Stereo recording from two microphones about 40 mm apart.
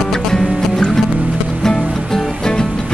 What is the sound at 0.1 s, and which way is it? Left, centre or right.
Music, centre.